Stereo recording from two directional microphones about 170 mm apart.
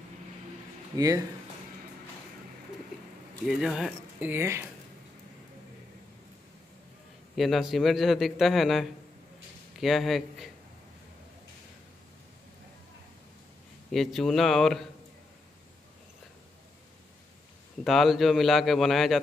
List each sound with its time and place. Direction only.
0.9 s speech: 20° right (ahead or behind)
3.4 s speech: 5° right (ahead or behind)
7.3 s a man's voice: centre (ahead or behind)
13.9 s a man's voice: centre (ahead or behind)
17.8 s a man's voice: centre (ahead or behind)